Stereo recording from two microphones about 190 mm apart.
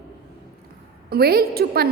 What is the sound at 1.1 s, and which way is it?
Speech, 55° right (ahead or behind).